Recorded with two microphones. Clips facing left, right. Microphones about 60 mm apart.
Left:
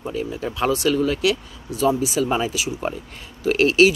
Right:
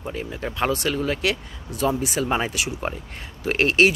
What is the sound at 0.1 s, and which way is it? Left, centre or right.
Speech, right.